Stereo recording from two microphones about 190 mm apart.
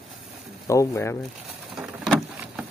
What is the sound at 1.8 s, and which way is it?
Vehicle, 5° right (ahead or behind).